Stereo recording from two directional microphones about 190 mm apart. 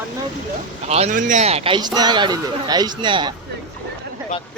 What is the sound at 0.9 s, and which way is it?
A man's voice, 35° right (ahead or behind).